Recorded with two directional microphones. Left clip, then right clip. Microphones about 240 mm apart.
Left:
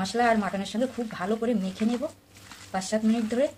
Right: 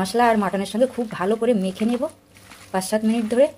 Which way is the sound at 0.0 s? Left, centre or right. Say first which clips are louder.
Right 6 dB; right.